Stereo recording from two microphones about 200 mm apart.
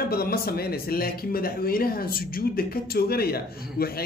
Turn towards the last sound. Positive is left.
turn(degrees=50)  # may be behind; listen again after turning